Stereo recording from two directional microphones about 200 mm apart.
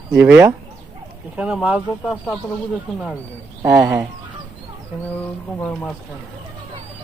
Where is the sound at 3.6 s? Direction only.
20° right (ahead or behind).